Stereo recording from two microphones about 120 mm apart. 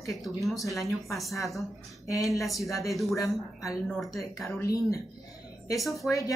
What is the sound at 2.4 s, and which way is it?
Speech, centre (ahead or behind).